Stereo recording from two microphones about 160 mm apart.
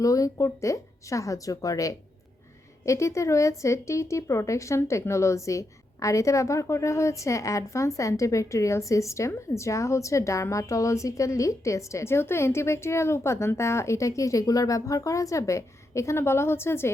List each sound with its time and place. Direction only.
0.0 s a woman's voice: 20° left (ahead or behind)